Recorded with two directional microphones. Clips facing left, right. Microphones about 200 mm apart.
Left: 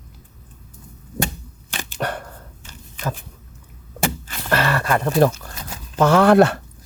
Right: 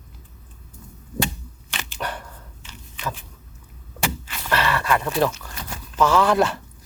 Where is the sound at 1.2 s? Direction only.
50° left (ahead or behind).